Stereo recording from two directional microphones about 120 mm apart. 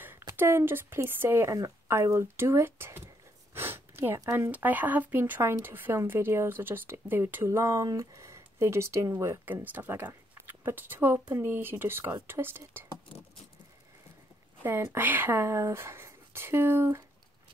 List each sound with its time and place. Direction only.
0.3 s speech: 20° right (ahead or behind)
14.6 s speech: 20° right (ahead or behind)